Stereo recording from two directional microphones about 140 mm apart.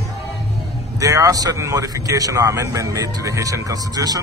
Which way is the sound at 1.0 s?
25° right (ahead or behind).